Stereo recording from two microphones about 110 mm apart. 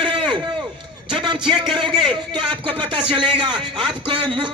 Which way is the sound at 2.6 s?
55° right (ahead or behind).